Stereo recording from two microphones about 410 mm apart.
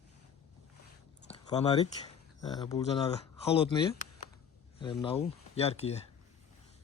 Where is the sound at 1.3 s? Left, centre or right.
Centre.